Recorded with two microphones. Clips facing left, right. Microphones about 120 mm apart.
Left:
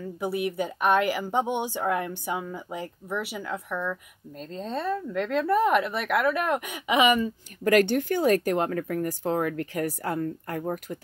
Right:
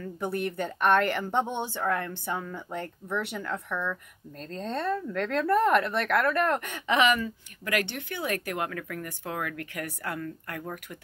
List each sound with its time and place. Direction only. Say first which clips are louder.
0.0 s speech: left 2 dB; 5° left (ahead or behind)
7.6 s speech: left 10 dB; 40° left (ahead or behind)